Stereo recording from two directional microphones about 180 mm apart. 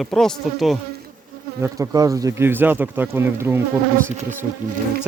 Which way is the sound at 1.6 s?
20° right (ahead or behind).